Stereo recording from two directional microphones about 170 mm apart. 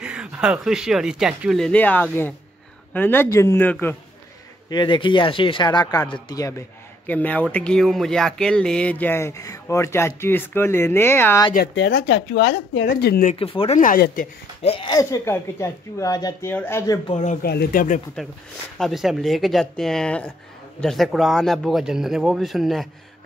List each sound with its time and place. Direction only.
0.0 s speech: 5° right (ahead or behind); by 3.7 s 15° left (ahead or behind)
4.6 s speech: 25° left (ahead or behind)
7.1 s speech: 10° left (ahead or behind)
11.5 s speech: 80° left
12.9 s speech: 60° left (ahead or behind)
13.3 s speech: 30° left (ahead or behind)
13.7 s speech: 55° left (ahead or behind)
14.6 s speech: 35° left (ahead or behind)
15.0 s speech: 15° left (ahead or behind)
17.1 s speech: 40° left (ahead or behind)
17.4 s speech: 65° left (ahead or behind)
18.8 s speech: centre (ahead or behind)